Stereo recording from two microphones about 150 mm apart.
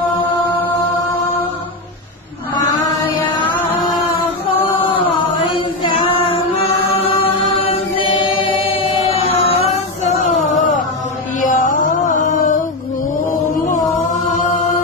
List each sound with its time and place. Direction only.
7.6 s chant: 35° left (ahead or behind)
10.5 s a sound: 55° left (ahead or behind)
11.4 s music: 60° left (ahead or behind)
13.3 s chant: 65° left (ahead or behind)